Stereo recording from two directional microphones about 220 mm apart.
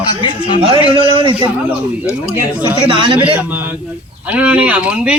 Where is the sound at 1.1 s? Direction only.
25° right (ahead or behind).